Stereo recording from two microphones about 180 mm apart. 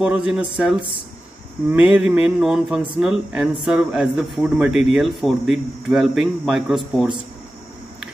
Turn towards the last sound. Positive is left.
turn(degrees=0)  # may be behind; listen again after turning